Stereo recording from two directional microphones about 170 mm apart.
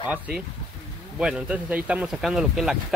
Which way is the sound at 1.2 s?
5° right (ahead or behind).